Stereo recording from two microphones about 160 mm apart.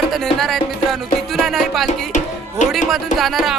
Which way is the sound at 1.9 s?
50° left (ahead or behind).